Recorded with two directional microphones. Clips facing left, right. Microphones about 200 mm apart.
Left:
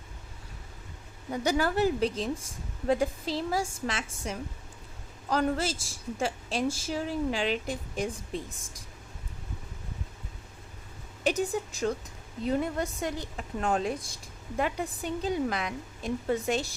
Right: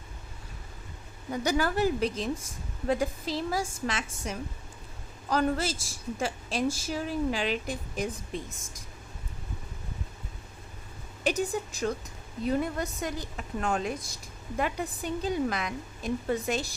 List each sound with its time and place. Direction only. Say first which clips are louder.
1.3 s speech: even; 25° left (ahead or behind)
11.2 s speech: left 1 dB; 25° left (ahead or behind)